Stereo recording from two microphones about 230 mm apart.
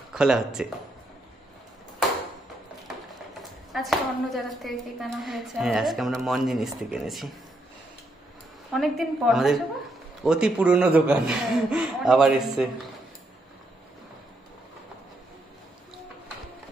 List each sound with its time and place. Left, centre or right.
0.1 s speech: centre
3.7 s a woman's voice: centre
8.7 s a woman's voice: centre